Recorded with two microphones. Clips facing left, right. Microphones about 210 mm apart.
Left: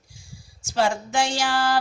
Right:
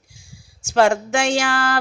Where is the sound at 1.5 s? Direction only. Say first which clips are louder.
Right 1 dB; 55° right (ahead or behind).